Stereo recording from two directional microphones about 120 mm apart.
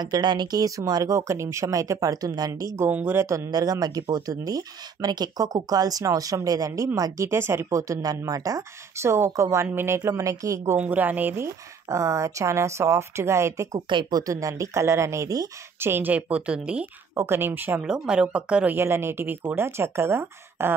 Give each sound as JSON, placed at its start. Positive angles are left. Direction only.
{"t": 0.0, "sound": "speech", "side_deg": -35}
{"t": 10.8, "sound": "speech", "side_deg": -15}
{"t": 13.7, "sound": "speech", "side_deg": -40}
{"t": 14.2, "sound": "speech", "side_deg": -25}
{"t": 15.8, "sound": "speech", "side_deg": -15}
{"t": 17.1, "sound": "speech", "side_deg": -20}
{"t": 18.8, "sound": "speech", "side_deg": -20}